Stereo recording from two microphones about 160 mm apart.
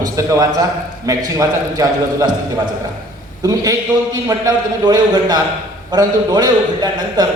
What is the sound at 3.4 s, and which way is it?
A man's voice, 20° right (ahead or behind).